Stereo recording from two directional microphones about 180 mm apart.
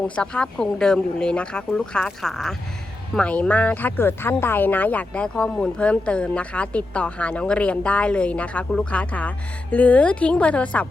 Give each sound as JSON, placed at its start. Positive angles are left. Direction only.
{"t": 0.2, "sound": "speech", "side_deg": 5}